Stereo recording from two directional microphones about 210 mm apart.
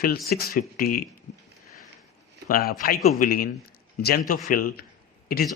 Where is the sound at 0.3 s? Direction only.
45° left (ahead or behind).